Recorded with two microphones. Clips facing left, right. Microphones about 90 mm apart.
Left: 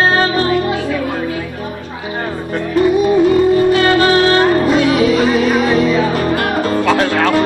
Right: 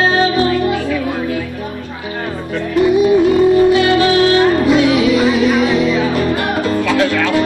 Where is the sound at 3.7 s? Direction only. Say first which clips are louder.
Even; 45° left (ahead or behind).